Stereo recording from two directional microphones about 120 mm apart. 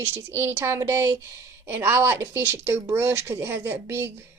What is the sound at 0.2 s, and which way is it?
Speech, 20° right (ahead or behind).